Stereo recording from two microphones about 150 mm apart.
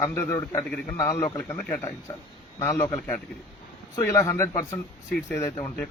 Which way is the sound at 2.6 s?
20° left (ahead or behind).